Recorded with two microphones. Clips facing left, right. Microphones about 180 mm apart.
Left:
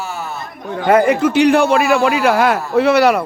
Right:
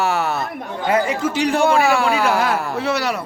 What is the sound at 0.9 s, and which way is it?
A man's voice, 55° left (ahead or behind).